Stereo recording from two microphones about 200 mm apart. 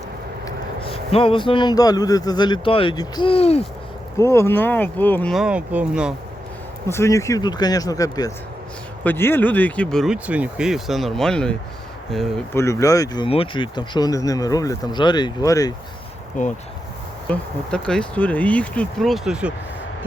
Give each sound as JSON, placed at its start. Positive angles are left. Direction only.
{"t": 0.9, "sound": "a man's voice", "side_deg": 30}
{"t": 4.2, "sound": "speech", "side_deg": 15}
{"t": 6.8, "sound": "speech", "side_deg": 15}
{"t": 12.5, "sound": "speech", "side_deg": 15}
{"t": 16.4, "sound": "speech", "side_deg": 40}
{"t": 17.2, "sound": "speech", "side_deg": 5}